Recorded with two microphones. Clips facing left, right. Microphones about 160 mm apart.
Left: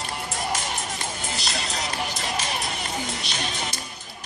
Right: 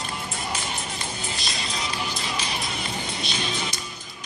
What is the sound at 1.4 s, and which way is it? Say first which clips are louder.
Music: left 2 dB; 70° left (ahead or behind).